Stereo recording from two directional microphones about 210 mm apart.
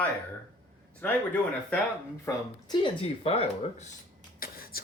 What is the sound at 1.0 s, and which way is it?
Speech, 5° left (ahead or behind).